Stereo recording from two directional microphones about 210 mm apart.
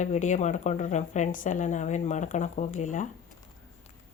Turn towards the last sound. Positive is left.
turn(degrees=35)  # may be behind; listen again after turning